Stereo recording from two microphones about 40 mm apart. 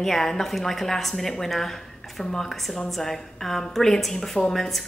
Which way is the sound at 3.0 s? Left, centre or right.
Centre.